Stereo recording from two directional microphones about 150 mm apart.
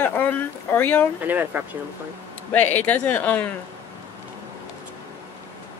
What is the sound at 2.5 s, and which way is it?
Speech, 10° left (ahead or behind).